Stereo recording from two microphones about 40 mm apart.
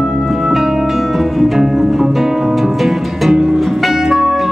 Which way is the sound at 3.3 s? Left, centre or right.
Centre.